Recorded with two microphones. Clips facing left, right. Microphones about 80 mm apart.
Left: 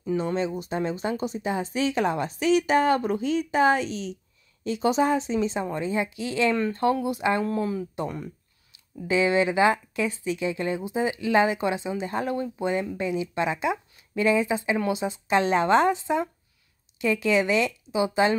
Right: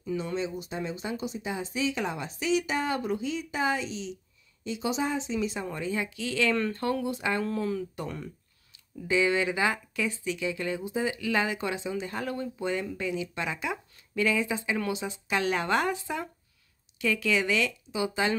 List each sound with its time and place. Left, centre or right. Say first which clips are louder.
0.0 s speech: left 5 dB; left
5.5 s speech: left 5 dB; left